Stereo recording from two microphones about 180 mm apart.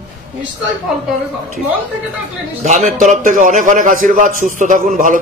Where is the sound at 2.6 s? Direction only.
40° right (ahead or behind).